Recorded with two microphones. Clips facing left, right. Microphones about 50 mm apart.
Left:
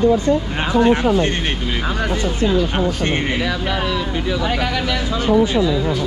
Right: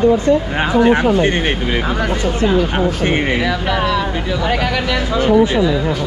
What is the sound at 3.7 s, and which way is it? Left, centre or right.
Speech, centre.